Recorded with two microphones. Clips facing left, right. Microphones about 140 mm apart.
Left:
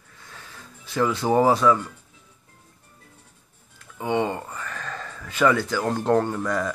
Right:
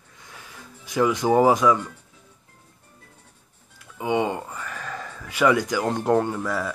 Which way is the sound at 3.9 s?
10° right (ahead or behind).